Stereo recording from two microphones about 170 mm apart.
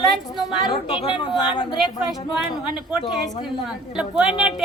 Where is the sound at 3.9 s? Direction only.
5° right (ahead or behind).